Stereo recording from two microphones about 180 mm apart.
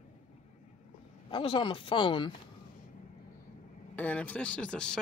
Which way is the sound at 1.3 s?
30° left (ahead or behind).